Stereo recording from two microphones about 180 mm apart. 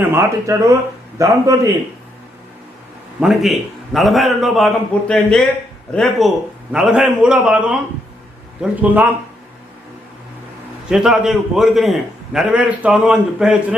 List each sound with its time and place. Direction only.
0.0 s speech: 15° right (ahead or behind)
3.2 s a man's voice: centre (ahead or behind)
10.8 s a man's voice: centre (ahead or behind)